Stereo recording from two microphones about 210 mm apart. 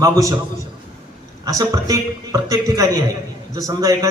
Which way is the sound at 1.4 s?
15° right (ahead or behind).